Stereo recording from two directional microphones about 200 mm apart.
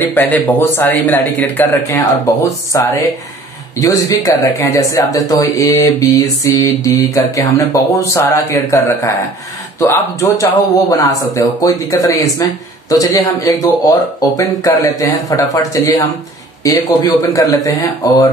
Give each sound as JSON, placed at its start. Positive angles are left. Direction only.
{"t": 0.1, "sound": "speech", "side_deg": 10}